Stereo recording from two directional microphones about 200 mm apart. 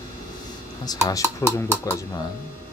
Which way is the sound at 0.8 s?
15° left (ahead or behind).